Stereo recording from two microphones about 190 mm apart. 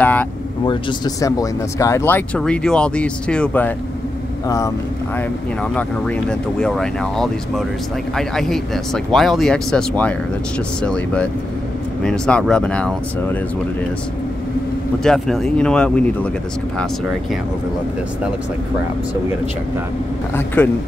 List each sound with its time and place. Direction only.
0.0 s vehicle: 10° left (ahead or behind)
0.7 s speech: 25° left (ahead or behind)
5.6 s speech: 5° left (ahead or behind)
15.0 s speech: centre (ahead or behind)
20.3 s speech: 10° left (ahead or behind)